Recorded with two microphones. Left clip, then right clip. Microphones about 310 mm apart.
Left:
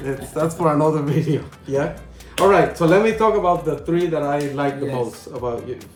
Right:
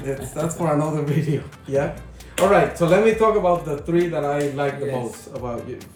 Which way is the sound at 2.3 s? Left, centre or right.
Centre.